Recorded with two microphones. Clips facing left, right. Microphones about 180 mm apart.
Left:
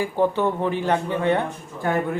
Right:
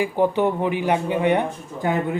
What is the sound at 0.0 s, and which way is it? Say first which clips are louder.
A man's voice: right 2 dB; 15° right (ahead or behind).